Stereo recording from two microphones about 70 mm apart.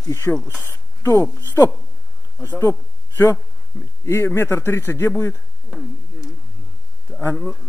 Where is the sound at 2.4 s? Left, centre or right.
Left.